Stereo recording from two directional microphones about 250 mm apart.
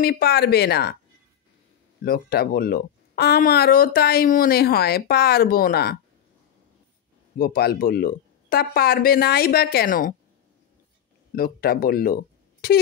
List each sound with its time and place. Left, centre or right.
0.0 s speech: left
2.0 s speech: left
7.3 s speech: left
11.3 s speech: left